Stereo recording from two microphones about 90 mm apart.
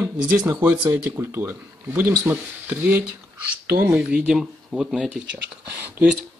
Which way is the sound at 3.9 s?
10° right (ahead or behind).